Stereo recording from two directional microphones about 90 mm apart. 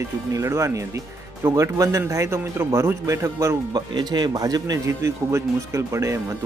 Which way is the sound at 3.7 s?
50° right (ahead or behind).